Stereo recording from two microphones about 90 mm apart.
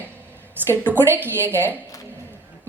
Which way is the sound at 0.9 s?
25° right (ahead or behind).